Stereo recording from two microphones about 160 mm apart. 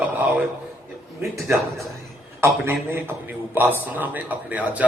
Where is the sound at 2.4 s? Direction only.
15° right (ahead or behind).